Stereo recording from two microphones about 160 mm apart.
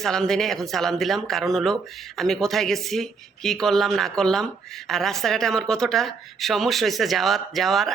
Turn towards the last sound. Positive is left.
turn(degrees=0)  # may be behind; listen again after turning